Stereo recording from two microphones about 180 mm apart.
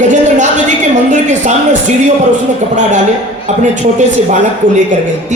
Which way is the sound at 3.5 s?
40° right (ahead or behind).